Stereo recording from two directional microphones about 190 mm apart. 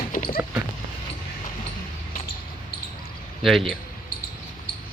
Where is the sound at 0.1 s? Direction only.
45° left (ahead or behind).